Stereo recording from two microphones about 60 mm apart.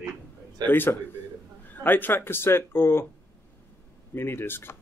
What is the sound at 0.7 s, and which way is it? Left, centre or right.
Speech, left.